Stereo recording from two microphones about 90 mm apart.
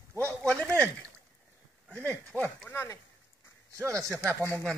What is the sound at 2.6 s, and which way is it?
Speech, 30° left (ahead or behind).